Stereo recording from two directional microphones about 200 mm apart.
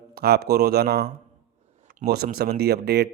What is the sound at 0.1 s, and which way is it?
Speech, 50° right (ahead or behind).